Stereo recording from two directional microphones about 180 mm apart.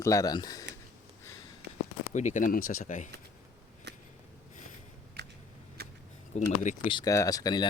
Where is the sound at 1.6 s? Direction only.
65° right (ahead or behind).